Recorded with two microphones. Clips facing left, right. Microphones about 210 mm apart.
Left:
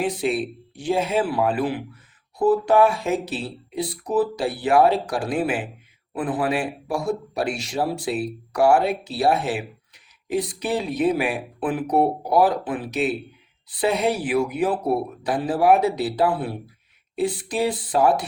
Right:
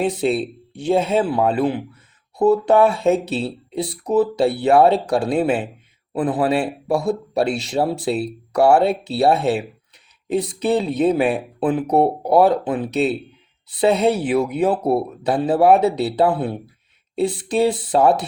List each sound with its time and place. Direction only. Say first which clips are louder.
0.0 s a man's voice: right 4 dB; 25° right (ahead or behind)